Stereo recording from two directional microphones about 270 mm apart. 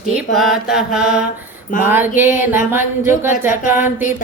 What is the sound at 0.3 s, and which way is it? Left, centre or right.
Mantra, centre.